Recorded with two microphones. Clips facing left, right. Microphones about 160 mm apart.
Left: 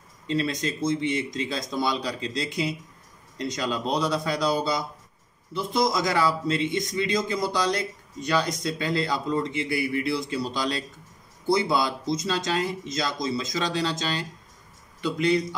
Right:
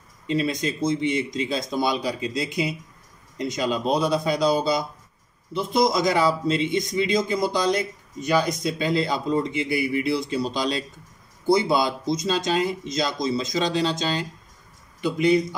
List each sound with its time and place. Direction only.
0.3 s a man's voice: 15° right (ahead or behind)